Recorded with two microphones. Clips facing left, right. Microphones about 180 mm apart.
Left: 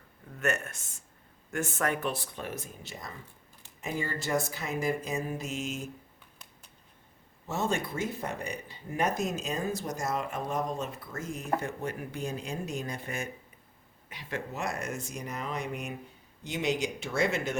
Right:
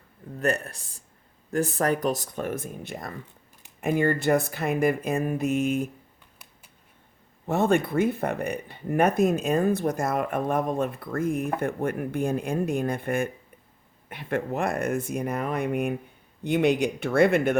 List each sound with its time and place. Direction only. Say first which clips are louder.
0.3 s speech: right 5 dB; 35° right (ahead or behind); by 5.9 s 55° right (ahead or behind)
7.4 s speech: right 9 dB; 60° right (ahead or behind)